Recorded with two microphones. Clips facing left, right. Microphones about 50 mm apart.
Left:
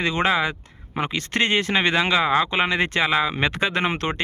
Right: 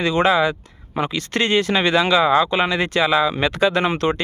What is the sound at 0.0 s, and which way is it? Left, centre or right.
Speech, left.